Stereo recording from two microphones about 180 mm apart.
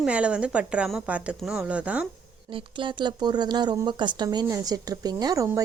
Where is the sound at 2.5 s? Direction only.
30° right (ahead or behind).